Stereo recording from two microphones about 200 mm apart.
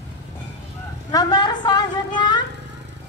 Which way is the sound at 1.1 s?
20° left (ahead or behind).